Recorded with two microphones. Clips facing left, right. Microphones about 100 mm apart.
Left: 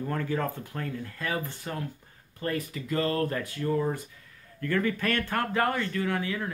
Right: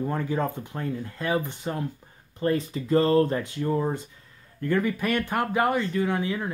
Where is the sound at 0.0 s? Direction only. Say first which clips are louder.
Right 3 dB; 20° right (ahead or behind).